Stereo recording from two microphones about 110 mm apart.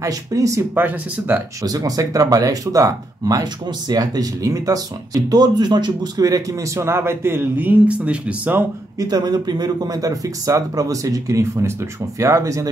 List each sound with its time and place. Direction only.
0.0 s speech: 30° right (ahead or behind)
0.8 s speech: 15° right (ahead or behind)
1.6 s speech: 30° right (ahead or behind); by 8.6 s 15° right (ahead or behind)
9.0 s speech: 35° right (ahead or behind)